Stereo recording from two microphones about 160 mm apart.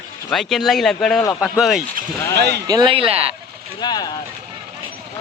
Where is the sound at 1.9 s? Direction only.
90° right.